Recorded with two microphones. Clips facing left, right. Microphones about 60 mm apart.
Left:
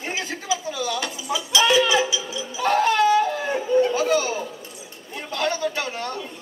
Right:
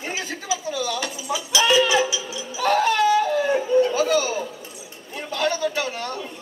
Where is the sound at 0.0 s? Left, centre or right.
Left.